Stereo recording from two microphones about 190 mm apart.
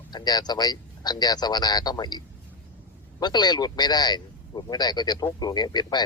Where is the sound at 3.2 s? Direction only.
20° left (ahead or behind).